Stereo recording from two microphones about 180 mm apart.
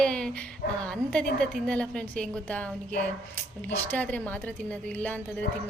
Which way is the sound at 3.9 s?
10° left (ahead or behind).